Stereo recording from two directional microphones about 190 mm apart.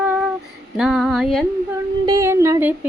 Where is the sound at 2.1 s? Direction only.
15° right (ahead or behind).